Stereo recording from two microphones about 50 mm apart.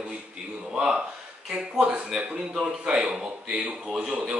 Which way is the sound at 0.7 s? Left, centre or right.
Centre.